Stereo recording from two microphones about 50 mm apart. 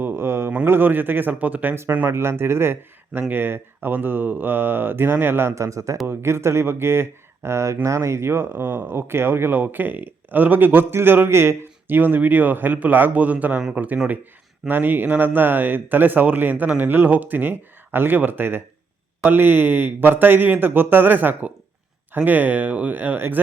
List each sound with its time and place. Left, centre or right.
0.0 s a sound: right
0.6 s speech: right
2.0 s speech: right
3.1 s speech: right
5.5 s a man's voice: right
6.1 s speech: right
11.3 s speech: right